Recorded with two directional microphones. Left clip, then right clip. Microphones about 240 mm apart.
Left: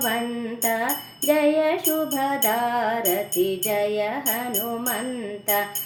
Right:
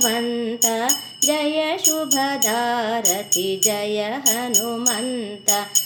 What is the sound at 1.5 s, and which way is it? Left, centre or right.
Music, right.